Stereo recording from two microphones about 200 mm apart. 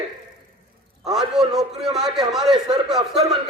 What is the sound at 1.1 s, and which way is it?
A man's voice, centre (ahead or behind).